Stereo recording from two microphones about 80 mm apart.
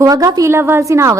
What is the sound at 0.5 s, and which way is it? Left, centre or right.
Speech, right.